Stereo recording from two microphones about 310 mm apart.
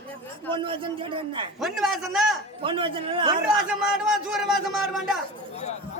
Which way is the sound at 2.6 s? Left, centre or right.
Centre.